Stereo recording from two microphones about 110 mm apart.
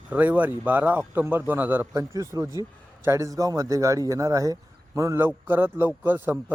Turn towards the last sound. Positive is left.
turn(degrees=-20)  # may be behind; listen again after turning